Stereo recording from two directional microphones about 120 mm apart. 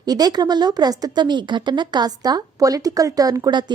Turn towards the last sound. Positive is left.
turn(degrees=-35)  # may be behind; listen again after turning